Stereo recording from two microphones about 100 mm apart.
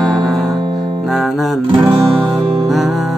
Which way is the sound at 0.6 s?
50° right (ahead or behind).